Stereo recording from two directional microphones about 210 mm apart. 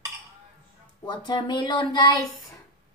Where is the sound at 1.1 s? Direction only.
20° left (ahead or behind).